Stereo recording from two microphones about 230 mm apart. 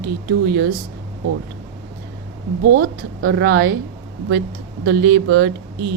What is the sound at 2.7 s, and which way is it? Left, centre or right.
A woman's voice, right.